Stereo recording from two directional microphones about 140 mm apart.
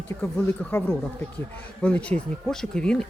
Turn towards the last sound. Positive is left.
turn(degrees=5)  # may be behind; listen again after turning